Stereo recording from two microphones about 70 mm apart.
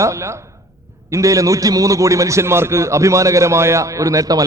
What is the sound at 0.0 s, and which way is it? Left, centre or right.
A man's voice, right.